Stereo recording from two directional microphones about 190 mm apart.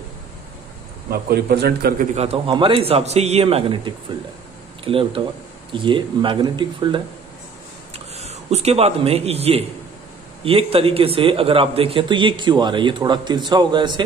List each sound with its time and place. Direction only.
1.1 s a man's voice: 55° right (ahead or behind)
2.1 s a man's voice: 30° right (ahead or behind)
8.2 s a man's voice: 35° right (ahead or behind)